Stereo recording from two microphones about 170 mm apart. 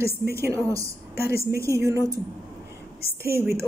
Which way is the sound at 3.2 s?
15° right (ahead or behind).